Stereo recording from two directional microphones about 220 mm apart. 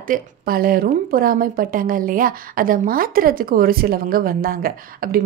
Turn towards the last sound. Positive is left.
turn(degrees=-40)  # may be behind; listen again after turning